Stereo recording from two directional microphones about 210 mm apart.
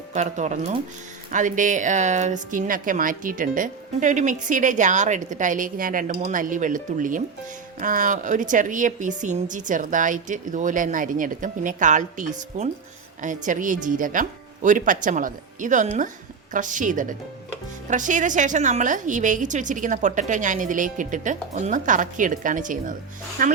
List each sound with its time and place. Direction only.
0.1 s speech: 35° right (ahead or behind)